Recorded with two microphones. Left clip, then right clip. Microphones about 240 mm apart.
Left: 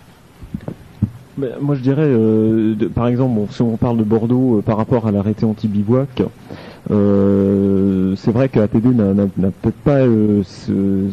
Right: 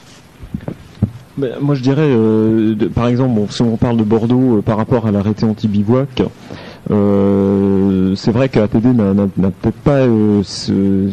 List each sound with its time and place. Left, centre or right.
1.0 s heart sounds: centre
1.4 s a man's voice: centre